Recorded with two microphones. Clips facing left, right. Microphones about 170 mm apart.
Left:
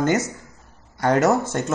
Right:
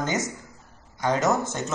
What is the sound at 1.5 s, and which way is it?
Speech, 60° left (ahead or behind).